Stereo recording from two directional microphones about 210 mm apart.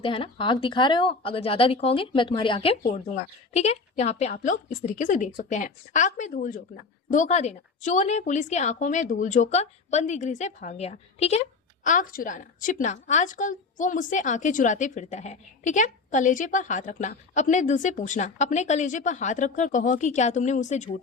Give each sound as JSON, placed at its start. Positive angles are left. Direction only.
{"t": 0.0, "sound": "speech", "side_deg": 25}
{"t": 2.8, "sound": "a woman's voice", "side_deg": 35}